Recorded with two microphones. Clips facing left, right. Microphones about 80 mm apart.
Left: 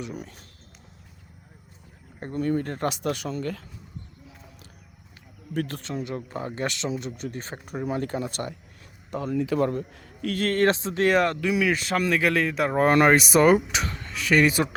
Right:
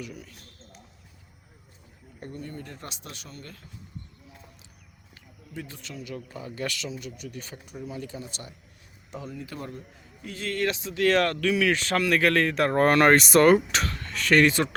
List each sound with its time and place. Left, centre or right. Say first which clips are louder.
0.0 s speech: left 5 dB; left
2.3 s speech: left 14 dB; left
5.5 s speech: left 10 dB; left
5.8 s speech: left 6 dB; left
6.6 s speech: left 3 dB; left
7.8 s speech: left 9 dB; left
10.4 s speech: left 6 dB; left
11.1 s speech: even; centre
11.7 s speech: even; centre